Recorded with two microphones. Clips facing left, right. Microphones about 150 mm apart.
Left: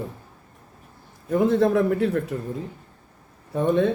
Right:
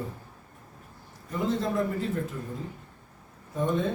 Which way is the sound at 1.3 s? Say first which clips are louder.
Left 10 dB; 55° left (ahead or behind).